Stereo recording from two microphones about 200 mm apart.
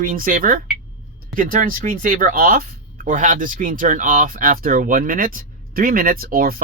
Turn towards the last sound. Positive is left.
turn(degrees=-45)  # may be behind; listen again after turning